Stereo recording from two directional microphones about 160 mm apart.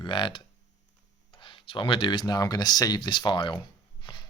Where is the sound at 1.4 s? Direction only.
30° left (ahead or behind).